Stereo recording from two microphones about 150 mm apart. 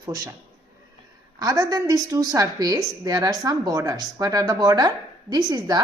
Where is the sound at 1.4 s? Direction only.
25° right (ahead or behind).